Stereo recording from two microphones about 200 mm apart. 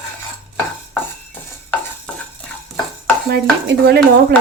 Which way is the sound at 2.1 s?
5° left (ahead or behind).